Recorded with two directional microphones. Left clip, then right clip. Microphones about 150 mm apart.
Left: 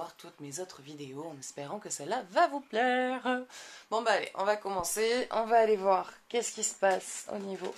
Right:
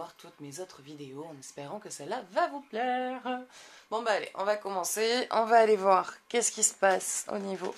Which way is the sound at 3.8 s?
25° left (ahead or behind).